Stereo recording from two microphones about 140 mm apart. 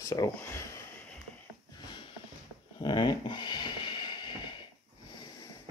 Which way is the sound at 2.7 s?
30° left (ahead or behind).